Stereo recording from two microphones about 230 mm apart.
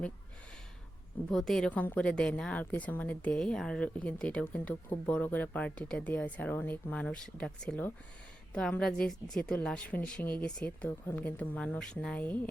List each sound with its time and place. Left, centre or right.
1.3 s a woman's voice: centre